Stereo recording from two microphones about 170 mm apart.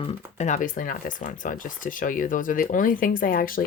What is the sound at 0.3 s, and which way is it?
Speech, 45° left (ahead or behind).